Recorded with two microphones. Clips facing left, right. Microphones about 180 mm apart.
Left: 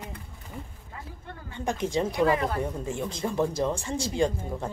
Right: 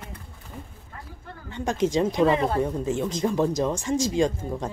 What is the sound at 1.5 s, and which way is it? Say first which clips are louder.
Speech: right 4 dB; 20° right (ahead or behind).